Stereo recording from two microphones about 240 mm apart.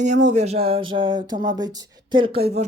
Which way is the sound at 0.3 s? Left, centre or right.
Right.